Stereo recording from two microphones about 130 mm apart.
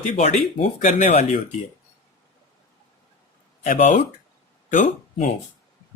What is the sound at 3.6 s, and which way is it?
Speech, 65° left (ahead or behind).